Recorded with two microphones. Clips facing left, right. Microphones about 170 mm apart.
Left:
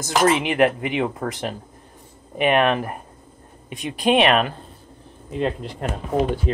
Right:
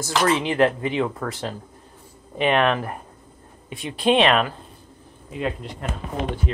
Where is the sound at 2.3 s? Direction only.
15° left (ahead or behind).